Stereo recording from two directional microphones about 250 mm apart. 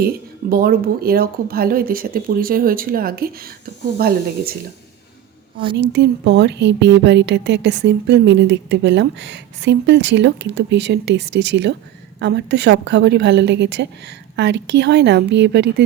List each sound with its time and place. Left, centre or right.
0.5 s speech: right
5.7 s speech: right